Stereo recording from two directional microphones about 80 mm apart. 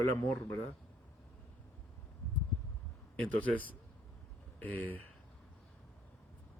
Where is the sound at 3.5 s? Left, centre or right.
Centre.